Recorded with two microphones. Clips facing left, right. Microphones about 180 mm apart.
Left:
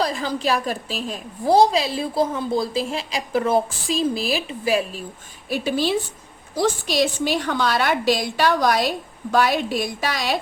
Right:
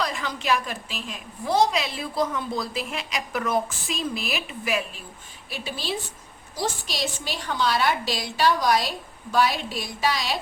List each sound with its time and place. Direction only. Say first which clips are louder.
0.0 s a woman's voice: left 6 dB; 35° left (ahead or behind)
5.5 s a woman's voice: left 10 dB; 50° left (ahead or behind)